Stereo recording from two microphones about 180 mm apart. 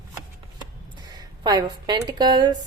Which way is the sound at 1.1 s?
20° right (ahead or behind).